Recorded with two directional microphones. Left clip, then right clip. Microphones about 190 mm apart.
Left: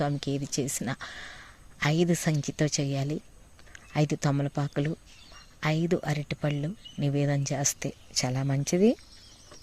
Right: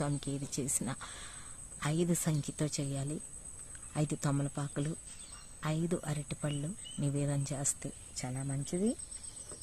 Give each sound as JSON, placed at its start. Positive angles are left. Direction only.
{"t": 0.0, "sound": "speech", "side_deg": 20}
{"t": 8.2, "sound": "speech", "side_deg": 40}